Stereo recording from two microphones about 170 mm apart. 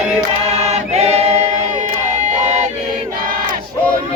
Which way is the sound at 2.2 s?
45° right (ahead or behind).